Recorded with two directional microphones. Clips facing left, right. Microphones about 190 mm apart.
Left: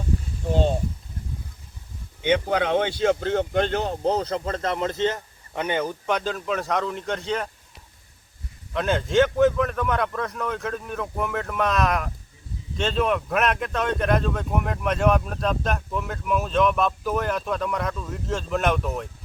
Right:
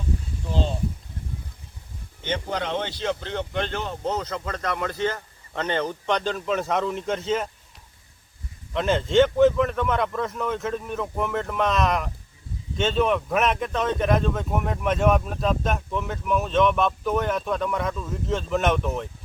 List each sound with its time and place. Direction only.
2.3 s speech: 60° left (ahead or behind); by 7.4 s centre (ahead or behind)
8.7 s speech: centre (ahead or behind)